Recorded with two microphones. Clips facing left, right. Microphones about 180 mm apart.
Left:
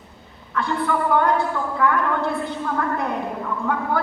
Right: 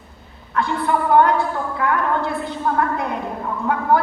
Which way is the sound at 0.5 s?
60° right (ahead or behind).